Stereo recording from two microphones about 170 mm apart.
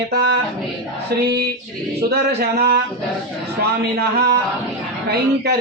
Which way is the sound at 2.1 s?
70° right (ahead or behind).